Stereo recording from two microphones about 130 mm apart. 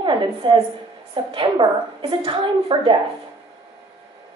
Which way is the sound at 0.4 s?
40° right (ahead or behind).